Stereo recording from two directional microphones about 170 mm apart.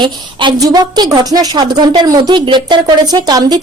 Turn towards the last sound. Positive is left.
turn(degrees=-25)  # may be behind; listen again after turning